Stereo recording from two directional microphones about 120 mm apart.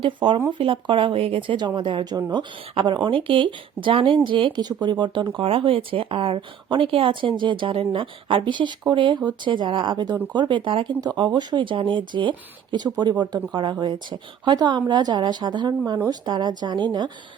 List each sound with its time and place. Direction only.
0.0 s speech: 40° right (ahead or behind)